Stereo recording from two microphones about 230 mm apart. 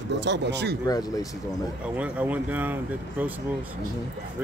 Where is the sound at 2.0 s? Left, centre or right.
Centre.